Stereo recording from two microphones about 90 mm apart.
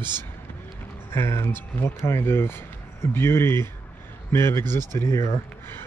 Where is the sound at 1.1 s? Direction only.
30° left (ahead or behind).